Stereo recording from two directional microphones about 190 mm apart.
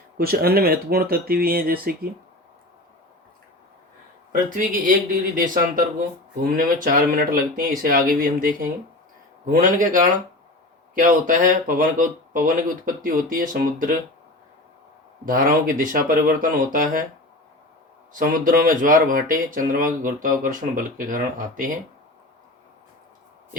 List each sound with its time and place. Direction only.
0.2 s speech: 55° right (ahead or behind)
4.4 s speech: 45° right (ahead or behind)
15.3 s speech: 45° right (ahead or behind)
18.1 s speech: 45° right (ahead or behind)